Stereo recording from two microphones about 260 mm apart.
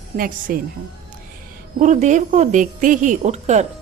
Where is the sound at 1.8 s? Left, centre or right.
Right.